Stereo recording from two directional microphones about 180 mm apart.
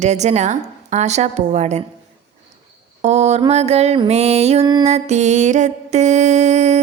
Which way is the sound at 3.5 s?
35° right (ahead or behind).